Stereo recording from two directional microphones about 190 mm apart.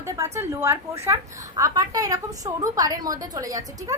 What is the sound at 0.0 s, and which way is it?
A woman's voice, 15° right (ahead or behind).